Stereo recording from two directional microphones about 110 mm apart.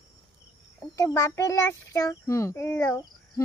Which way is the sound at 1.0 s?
30° left (ahead or behind).